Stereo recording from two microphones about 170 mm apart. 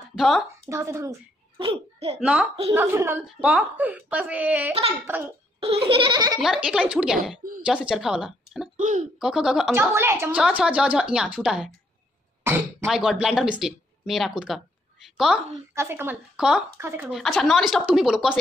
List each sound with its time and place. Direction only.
0.2 s speech: centre (ahead or behind)
0.7 s a woman's voice: 15° right (ahead or behind)
1.6 s a child's voice: 35° right (ahead or behind)
2.1 s a woman's voice: 5° right (ahead or behind)
5.9 s a sound: 30° right (ahead or behind)
6.4 s speech: 5° right (ahead or behind)
8.7 s speech: 50° right (ahead or behind)
9.2 s speech: 5° right (ahead or behind)
9.8 s a woman's voice: 15° right (ahead or behind)
12.8 s speech: centre (ahead or behind)
15.7 s a woman's voice: 15° right (ahead or behind)
17.1 s speech: centre (ahead or behind)